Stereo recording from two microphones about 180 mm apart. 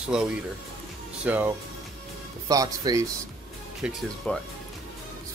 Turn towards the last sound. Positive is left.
turn(degrees=5)  # may be behind; listen again after turning